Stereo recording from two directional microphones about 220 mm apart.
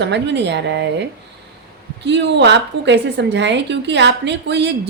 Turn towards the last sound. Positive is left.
turn(degrees=-50)  # may be behind; listen again after turning